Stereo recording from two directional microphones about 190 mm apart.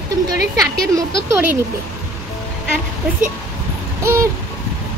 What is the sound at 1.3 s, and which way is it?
Speech, 10° right (ahead or behind).